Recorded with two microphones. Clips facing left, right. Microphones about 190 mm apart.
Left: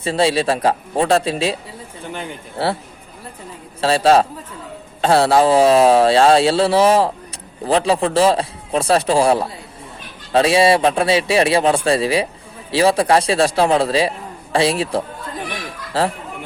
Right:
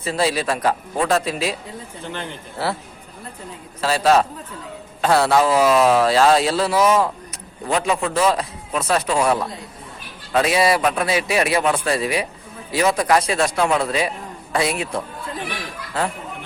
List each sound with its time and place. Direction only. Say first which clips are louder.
0.0 s speech: left 4 dB; 30° left (ahead or behind)
3.8 s a man's voice: left 3 dB; 30° left (ahead or behind)